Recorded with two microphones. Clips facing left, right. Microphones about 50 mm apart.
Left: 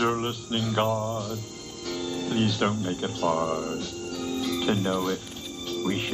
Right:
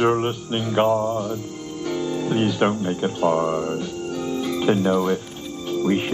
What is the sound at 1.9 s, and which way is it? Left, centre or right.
Speech, right.